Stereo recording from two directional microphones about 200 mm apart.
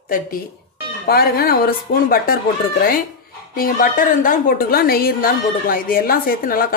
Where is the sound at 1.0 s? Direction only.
50° left (ahead or behind).